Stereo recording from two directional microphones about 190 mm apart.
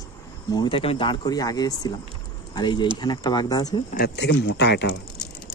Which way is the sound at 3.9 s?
60° left (ahead or behind).